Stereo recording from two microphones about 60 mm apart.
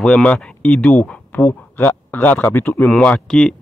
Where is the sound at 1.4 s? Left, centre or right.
Left.